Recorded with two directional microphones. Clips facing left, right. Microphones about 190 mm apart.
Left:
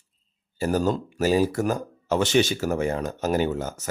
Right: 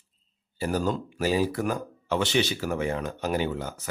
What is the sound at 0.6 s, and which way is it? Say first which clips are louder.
Speech: left 4 dB; 45° left (ahead or behind).